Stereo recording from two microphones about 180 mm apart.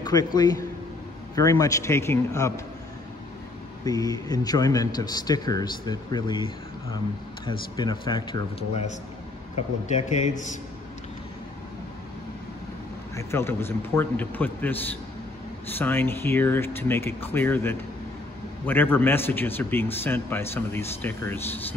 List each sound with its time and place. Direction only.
0.0 s a man's voice: 20° left (ahead or behind)
3.8 s speech: 20° left (ahead or behind)
9.6 s speech: 40° left (ahead or behind)
13.1 s a man's voice: 15° left (ahead or behind)
15.8 s a man's voice: 10° left (ahead or behind)